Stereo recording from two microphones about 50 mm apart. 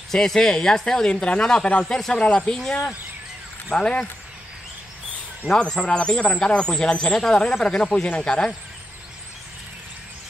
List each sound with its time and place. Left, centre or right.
0.1 s speech: centre
2.1 s speech: left
3.7 s speech: centre
5.6 s speech: centre